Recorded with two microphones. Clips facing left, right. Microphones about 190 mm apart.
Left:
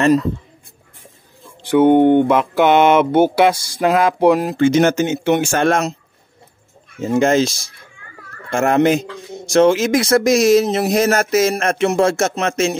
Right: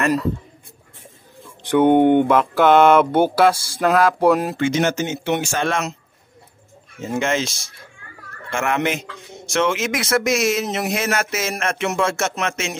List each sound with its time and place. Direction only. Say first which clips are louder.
1.7 s speech: left 3 dB; 5° left (ahead or behind)
2.0 s speech: left 2 dB; 10° right (ahead or behind)
2.2 s speech: left 1 dB; 10° left (ahead or behind)
4.6 s speech: left 6 dB; 45° left (ahead or behind)
7.0 s speech: left 7 dB; 35° left (ahead or behind)